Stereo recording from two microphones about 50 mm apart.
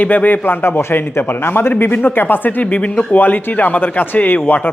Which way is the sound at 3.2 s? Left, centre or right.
Left.